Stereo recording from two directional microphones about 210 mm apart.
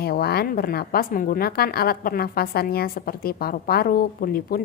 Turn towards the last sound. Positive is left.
turn(degrees=45)  # may be behind; listen again after turning